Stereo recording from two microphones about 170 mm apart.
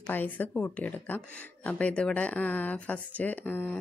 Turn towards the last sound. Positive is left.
turn(degrees=10)  # may be behind; listen again after turning